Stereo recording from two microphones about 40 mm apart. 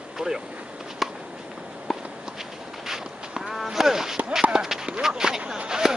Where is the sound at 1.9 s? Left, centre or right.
Centre.